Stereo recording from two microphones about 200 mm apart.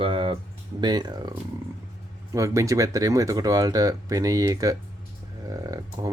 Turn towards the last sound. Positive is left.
turn(degrees=-15)  # may be behind; listen again after turning